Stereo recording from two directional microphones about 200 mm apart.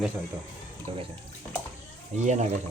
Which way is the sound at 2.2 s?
35° right (ahead or behind).